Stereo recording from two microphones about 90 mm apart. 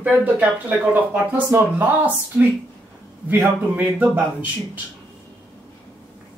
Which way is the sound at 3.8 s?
15° right (ahead or behind).